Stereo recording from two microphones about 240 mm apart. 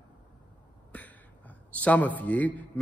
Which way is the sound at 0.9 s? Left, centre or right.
Centre.